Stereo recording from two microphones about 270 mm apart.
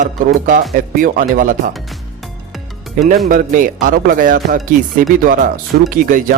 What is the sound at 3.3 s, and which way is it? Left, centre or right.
Speech, right.